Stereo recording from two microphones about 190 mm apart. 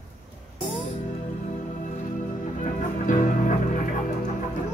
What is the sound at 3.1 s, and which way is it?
Music, 40° left (ahead or behind).